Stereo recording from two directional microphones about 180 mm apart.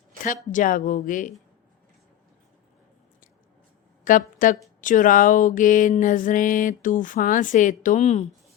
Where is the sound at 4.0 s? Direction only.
45° left (ahead or behind).